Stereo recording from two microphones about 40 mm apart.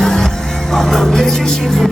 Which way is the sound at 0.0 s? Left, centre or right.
Centre.